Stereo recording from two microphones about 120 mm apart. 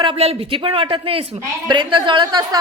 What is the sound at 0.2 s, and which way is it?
A woman's voice, 55° right (ahead or behind).